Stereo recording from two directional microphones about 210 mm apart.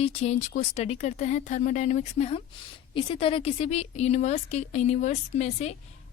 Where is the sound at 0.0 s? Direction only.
30° left (ahead or behind).